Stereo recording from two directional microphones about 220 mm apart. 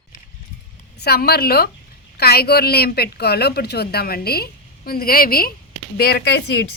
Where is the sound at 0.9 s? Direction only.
45° left (ahead or behind).